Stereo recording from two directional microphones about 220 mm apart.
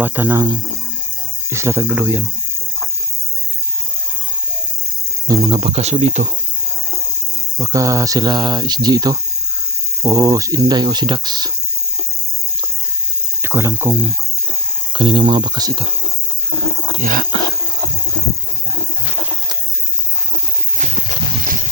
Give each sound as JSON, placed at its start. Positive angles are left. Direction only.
{"t": 0.0, "sound": "speech", "side_deg": -10}
{"t": 1.5, "sound": "speech", "side_deg": -10}
{"t": 5.3, "sound": "speech", "side_deg": -20}
{"t": 7.6, "sound": "speech", "side_deg": -15}
{"t": 13.4, "sound": "speech", "side_deg": -10}
{"t": 14.9, "sound": "speech", "side_deg": -20}
{"t": 17.0, "sound": "speech", "side_deg": -40}
{"t": 20.7, "sound": "horse", "side_deg": -35}